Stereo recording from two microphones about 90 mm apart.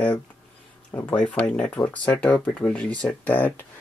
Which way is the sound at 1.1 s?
15° left (ahead or behind).